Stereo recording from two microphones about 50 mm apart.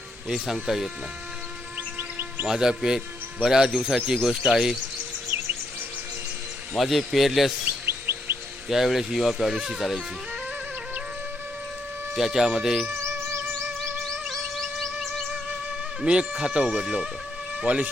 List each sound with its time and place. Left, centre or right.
0.3 s speech: centre
2.0 s music: right
2.5 s speech: centre
5.3 s music: right
6.7 s speech: centre
7.6 s chirp: right
8.7 s speech: centre
12.1 s speech: centre
13.0 s music: right
14.6 s music: centre
16.0 s speech: centre
17.7 s speech: right